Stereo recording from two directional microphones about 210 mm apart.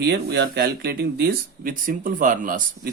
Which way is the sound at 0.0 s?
50° right (ahead or behind).